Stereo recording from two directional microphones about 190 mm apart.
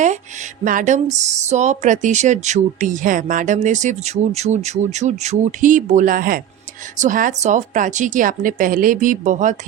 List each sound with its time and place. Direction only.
0.6 s speech: 45° right (ahead or behind)